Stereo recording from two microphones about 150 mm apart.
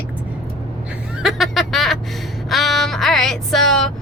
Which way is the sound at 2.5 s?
Centre (ahead or behind).